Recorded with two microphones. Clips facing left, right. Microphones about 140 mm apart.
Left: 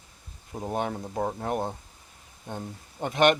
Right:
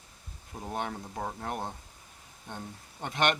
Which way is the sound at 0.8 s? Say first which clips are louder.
Left 6 dB; 40° left (ahead or behind).